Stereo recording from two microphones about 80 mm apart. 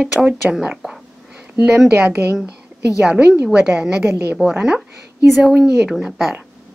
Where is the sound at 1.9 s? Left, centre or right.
Right.